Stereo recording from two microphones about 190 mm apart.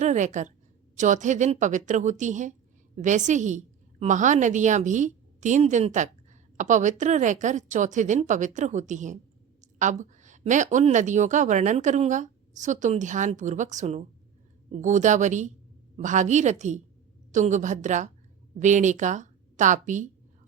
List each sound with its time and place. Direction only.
0.0 s a woman's voice: 40° right (ahead or behind)